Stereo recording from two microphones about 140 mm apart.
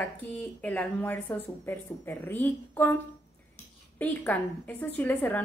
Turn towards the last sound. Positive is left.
turn(degrees=10)  # may be behind; listen again after turning